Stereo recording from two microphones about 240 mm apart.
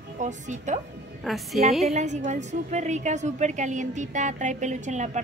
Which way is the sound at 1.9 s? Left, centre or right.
Right.